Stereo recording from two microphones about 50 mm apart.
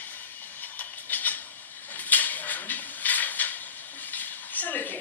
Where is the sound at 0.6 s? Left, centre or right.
Left.